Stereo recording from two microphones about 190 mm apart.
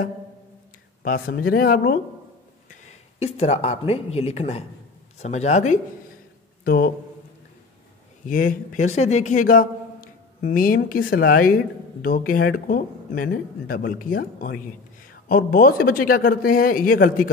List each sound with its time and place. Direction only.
1.0 s a man's voice: 50° left (ahead or behind)
2.7 s speech: 35° left (ahead or behind)
6.6 s speech: 55° left (ahead or behind)
8.3 s a man's voice: 45° left (ahead or behind)